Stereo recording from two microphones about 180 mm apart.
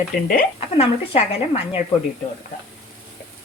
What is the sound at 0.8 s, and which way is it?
A woman's voice, 35° left (ahead or behind).